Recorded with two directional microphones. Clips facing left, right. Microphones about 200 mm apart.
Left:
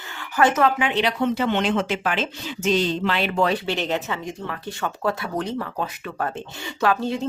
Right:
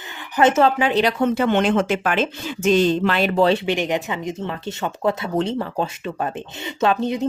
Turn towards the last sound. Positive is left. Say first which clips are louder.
# right 3 dB
turn(degrees=-20)  # may be behind; listen again after turning